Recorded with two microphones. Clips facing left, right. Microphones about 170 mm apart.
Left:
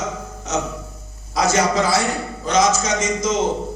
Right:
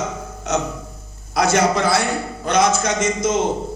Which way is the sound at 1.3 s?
60° right (ahead or behind).